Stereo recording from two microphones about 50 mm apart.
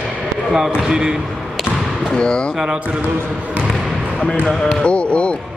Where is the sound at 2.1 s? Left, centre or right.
Centre.